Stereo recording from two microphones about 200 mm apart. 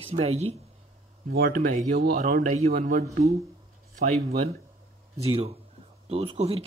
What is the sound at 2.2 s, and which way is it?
Speech, 40° right (ahead or behind).